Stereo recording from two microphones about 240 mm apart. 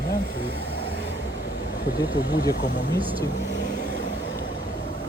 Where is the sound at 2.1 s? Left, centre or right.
Centre.